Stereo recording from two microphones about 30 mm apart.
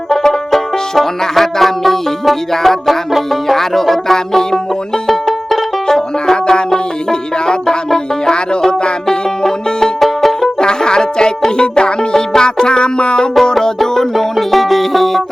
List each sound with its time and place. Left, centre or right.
0.1 s music: centre
5.0 s banjo: centre
6.3 s music: left
10.0 s music: centre
10.6 s music: left
13.4 s music: centre